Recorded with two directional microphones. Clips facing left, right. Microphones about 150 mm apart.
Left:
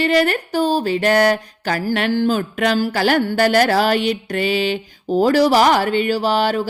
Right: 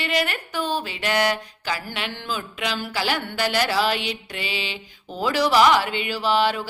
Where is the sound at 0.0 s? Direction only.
40° left (ahead or behind).